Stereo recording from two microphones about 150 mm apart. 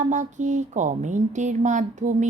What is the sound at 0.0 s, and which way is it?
Speech, 55° right (ahead or behind).